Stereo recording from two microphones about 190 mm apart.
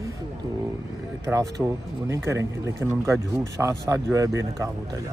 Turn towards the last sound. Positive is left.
turn(degrees=-15)  # may be behind; listen again after turning